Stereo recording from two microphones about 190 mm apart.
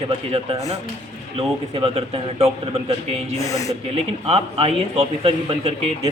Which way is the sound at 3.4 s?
15° left (ahead or behind).